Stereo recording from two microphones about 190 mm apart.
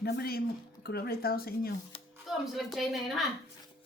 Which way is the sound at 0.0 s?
55° left (ahead or behind).